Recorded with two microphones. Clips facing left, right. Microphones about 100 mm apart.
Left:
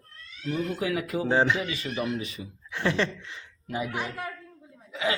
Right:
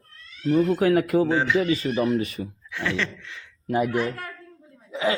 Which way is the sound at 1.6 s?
35° right (ahead or behind).